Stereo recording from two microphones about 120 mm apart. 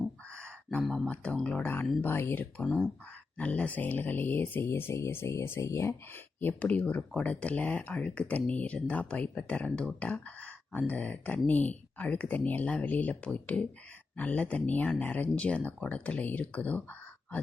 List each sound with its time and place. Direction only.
0.3 s speech: 10° left (ahead or behind)
2.6 s speech: centre (ahead or behind)
3.3 s speech: 10° left (ahead or behind)
6.4 s speech: 15° left (ahead or behind)